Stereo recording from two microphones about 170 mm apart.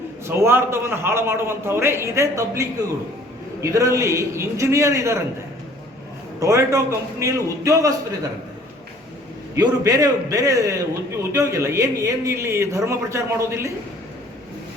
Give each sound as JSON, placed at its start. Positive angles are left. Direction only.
{"t": 0.3, "sound": "speech", "side_deg": -15}
{"t": 6.4, "sound": "a man's voice", "side_deg": -20}
{"t": 9.6, "sound": "a man's voice", "side_deg": -20}